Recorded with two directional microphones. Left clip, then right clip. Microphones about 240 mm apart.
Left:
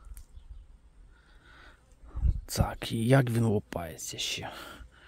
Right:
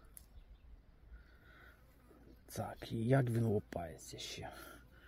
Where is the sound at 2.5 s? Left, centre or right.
Left.